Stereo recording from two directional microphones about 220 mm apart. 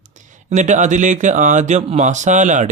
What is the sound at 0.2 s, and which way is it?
Speech, 35° right (ahead or behind).